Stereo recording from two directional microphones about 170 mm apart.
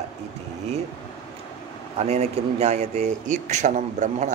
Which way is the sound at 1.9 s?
40° right (ahead or behind).